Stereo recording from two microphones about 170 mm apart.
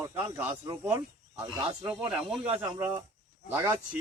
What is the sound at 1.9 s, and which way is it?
Speech, 5° right (ahead or behind).